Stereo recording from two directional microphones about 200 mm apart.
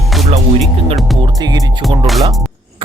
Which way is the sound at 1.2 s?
20° right (ahead or behind).